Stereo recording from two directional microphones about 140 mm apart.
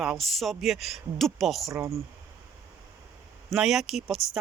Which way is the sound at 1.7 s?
20° right (ahead or behind).